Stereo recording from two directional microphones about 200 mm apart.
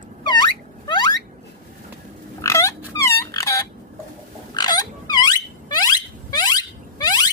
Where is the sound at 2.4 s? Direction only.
15° left (ahead or behind).